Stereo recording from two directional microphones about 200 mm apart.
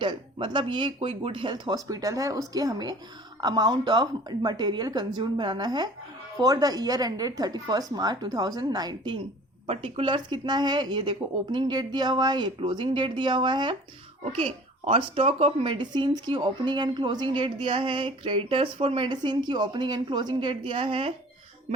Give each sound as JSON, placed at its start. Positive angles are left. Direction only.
{"t": 0.0, "sound": "speech", "side_deg": -25}